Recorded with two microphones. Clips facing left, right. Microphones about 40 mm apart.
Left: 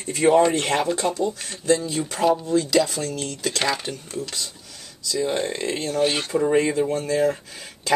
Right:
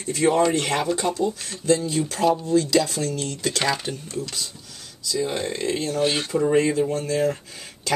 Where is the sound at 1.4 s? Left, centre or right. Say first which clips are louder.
Left 1 dB; centre.